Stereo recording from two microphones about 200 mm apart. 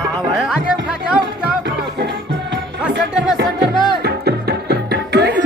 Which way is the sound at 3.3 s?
55° right (ahead or behind).